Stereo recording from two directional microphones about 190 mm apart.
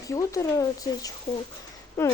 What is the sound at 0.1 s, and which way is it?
Speech, 15° left (ahead or behind).